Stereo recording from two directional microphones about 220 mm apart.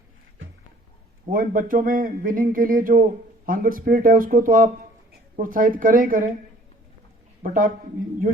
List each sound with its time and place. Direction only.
1.3 s speech: 40° right (ahead or behind)
7.4 s speech: 40° right (ahead or behind)